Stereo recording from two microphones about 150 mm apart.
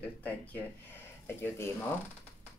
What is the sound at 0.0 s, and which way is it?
Speech, 10° left (ahead or behind).